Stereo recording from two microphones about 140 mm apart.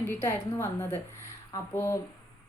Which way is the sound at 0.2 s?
20° left (ahead or behind).